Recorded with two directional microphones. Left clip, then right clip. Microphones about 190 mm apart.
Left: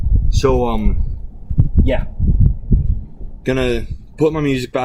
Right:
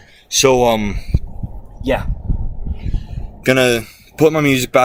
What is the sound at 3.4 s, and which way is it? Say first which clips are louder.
Speech: right 5 dB; 15° right (ahead or behind).